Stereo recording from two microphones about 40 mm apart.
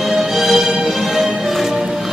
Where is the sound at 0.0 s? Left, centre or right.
Centre.